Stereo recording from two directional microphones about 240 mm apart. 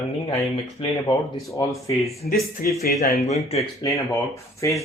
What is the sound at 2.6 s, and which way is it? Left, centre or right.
Speech, left.